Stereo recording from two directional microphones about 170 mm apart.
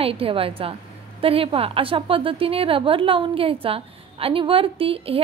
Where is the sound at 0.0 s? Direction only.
35° right (ahead or behind).